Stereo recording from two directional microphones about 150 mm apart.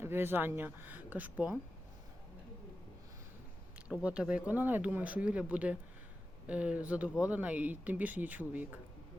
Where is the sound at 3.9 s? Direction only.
5° right (ahead or behind).